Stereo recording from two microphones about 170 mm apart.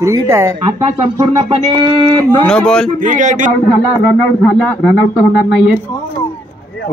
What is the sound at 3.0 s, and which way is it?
Speech, 50° right (ahead or behind).